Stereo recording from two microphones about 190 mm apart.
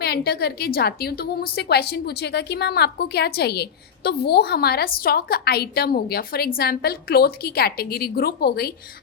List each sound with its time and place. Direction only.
0.0 s a woman's voice: 55° left (ahead or behind)